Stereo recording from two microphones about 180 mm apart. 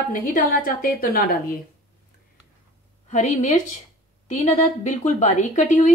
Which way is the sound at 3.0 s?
40° left (ahead or behind).